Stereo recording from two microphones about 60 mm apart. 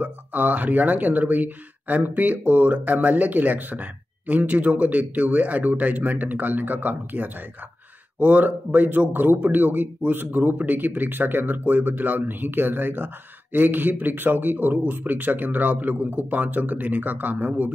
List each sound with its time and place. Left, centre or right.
0.0 s a man's voice: right